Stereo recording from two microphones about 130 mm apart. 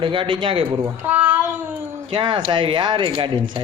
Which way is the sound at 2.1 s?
40° right (ahead or behind).